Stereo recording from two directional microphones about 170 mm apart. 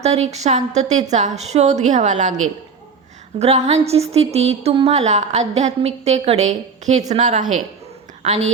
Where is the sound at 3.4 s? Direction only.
40° right (ahead or behind).